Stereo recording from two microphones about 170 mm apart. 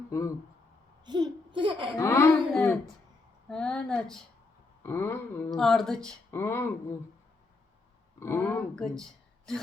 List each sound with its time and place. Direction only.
0.1 s speech: 20° left (ahead or behind)
1.0 s a child's voice: 25° right (ahead or behind)
2.0 s speech: 15° left (ahead or behind)
2.5 s a sound: 5° left (ahead or behind)
4.8 s speech: 15° left (ahead or behind)
5.5 s a sound: centre (ahead or behind)
6.3 s speech: 15° left (ahead or behind)
8.2 s speech: 15° left (ahead or behind)